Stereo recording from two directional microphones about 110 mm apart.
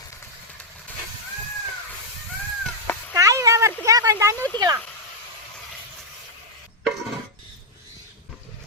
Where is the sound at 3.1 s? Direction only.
30° right (ahead or behind).